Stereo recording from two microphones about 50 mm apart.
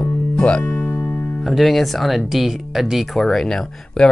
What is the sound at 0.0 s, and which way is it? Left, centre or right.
Music, left.